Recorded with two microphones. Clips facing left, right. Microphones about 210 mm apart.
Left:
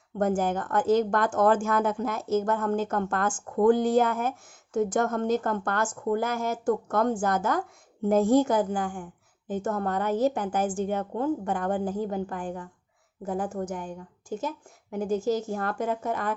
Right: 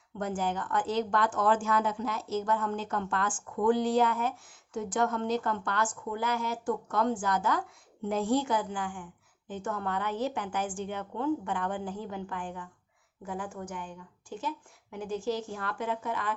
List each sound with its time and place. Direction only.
0.2 s a woman's voice: 45° left (ahead or behind)